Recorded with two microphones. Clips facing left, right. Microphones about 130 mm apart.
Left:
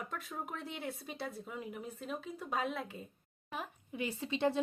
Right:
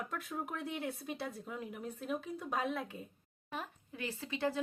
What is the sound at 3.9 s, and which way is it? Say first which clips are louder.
Speech: left 4 dB; 20° left (ahead or behind).